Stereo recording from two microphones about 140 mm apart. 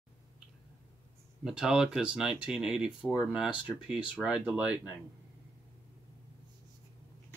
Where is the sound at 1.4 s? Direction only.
5° right (ahead or behind).